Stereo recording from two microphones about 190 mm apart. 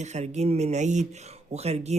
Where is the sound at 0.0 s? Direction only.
35° right (ahead or behind).